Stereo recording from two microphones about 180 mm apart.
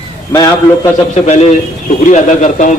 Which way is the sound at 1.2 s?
40° left (ahead or behind).